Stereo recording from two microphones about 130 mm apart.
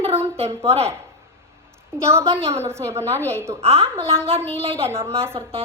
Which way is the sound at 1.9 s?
20° right (ahead or behind).